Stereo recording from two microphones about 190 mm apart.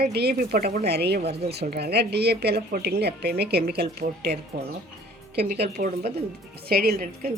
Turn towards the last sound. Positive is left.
turn(degrees=-50)  # may be behind; listen again after turning